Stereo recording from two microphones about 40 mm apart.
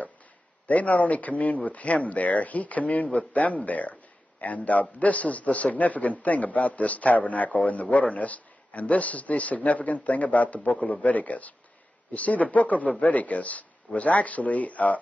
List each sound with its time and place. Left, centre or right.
0.7 s a man's voice: left